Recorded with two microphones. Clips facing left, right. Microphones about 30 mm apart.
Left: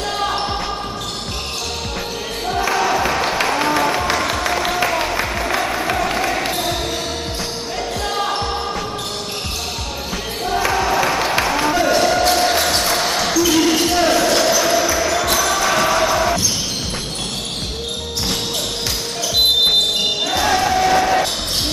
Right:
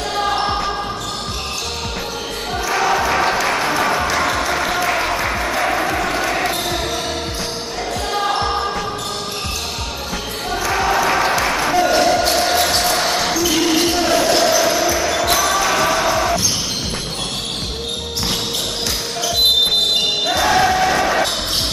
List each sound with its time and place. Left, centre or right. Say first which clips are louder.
2.7 s a sound: right 2 dB; centre
3.4 s music: even; centre
4.8 s applause: right 1 dB; centre
5.2 s music: right 1 dB; centre
5.9 s basketball bounce: even; centre
8.1 s basketball bounce: right 3 dB; centre
8.4 s basketball bounce: right 3 dB; centre
10.7 s a sound: right 4 dB; centre
11.1 s music: right 2 dB; centre
11.5 s basketball bounce: right 1 dB; centre
13.9 s a sound: even; centre
14.6 s music: even; centre
15.0 s basketball bounce: right 1 dB; centre
20.2 s basketball bounce: right 3 dB; centre